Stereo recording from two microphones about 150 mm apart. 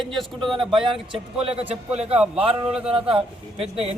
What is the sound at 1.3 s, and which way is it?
A man's voice, 40° right (ahead or behind).